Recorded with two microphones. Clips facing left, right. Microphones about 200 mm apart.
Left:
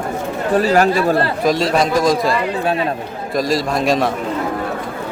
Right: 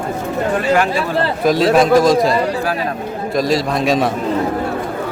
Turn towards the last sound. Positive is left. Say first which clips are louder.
# right 1 dB
turn(degrees=0)  # may be behind; listen again after turning